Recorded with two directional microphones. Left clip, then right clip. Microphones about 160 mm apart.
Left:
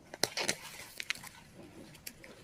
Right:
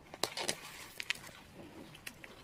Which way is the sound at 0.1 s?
10° left (ahead or behind).